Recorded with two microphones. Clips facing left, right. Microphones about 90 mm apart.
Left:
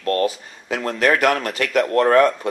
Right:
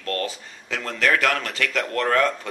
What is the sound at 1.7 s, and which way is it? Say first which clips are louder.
Speech: left 8 dB; 30° left (ahead or behind).